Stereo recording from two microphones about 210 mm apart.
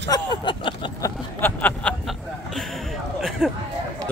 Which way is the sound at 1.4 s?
5° left (ahead or behind).